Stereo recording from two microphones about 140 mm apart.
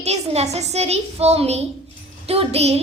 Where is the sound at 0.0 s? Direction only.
50° right (ahead or behind).